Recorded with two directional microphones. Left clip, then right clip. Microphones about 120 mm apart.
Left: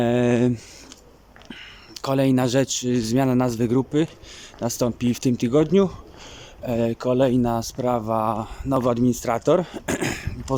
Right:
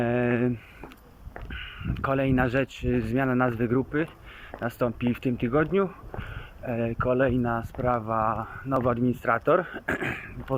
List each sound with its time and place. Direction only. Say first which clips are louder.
0.0 s speech: left 5 dB; 45° left (ahead or behind)